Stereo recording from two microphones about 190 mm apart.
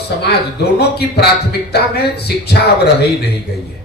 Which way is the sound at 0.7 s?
60° left (ahead or behind).